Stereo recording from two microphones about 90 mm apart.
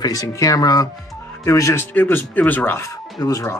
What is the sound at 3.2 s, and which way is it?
Speech, 40° left (ahead or behind).